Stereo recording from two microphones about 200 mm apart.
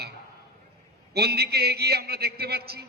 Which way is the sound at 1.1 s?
50° right (ahead or behind).